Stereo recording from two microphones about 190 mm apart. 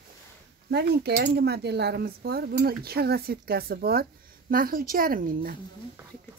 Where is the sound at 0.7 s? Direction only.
60° right (ahead or behind).